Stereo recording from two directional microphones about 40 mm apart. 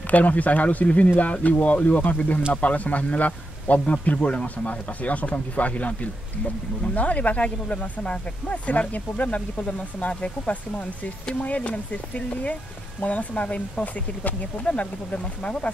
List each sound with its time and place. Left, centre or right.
0.1 s a man's voice: left
13.0 s a man's voice: left